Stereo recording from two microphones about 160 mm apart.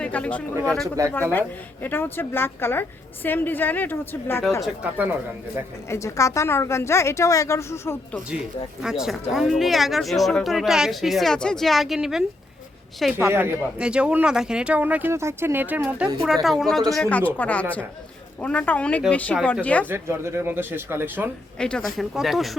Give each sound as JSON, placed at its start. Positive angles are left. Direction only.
{"t": 0.0, "sound": "a woman's voice", "side_deg": 5}
{"t": 4.6, "sound": "speech", "side_deg": -5}
{"t": 5.9, "sound": "a woman's voice", "side_deg": 20}
{"t": 8.8, "sound": "speech", "side_deg": -5}
{"t": 13.1, "sound": "a woman's voice", "side_deg": -15}
{"t": 19.9, "sound": "speech", "side_deg": -15}
{"t": 21.6, "sound": "speech", "side_deg": 5}